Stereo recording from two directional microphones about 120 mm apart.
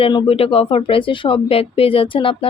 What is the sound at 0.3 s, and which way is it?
Speech, 55° left (ahead or behind).